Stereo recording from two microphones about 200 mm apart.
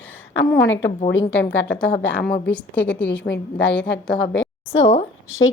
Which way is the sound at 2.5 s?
5° left (ahead or behind).